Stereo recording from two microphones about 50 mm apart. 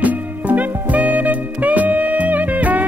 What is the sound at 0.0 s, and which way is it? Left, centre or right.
Music, right.